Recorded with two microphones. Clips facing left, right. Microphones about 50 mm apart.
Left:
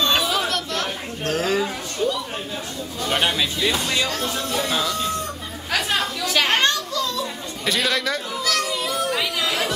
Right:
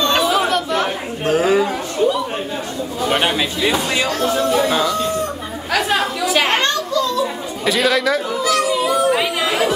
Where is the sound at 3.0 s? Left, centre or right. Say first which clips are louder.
Right 4 dB; centre.